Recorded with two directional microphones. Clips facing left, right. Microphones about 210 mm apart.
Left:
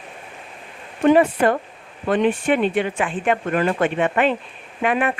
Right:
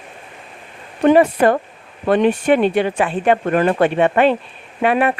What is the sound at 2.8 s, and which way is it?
Speech, 35° right (ahead or behind).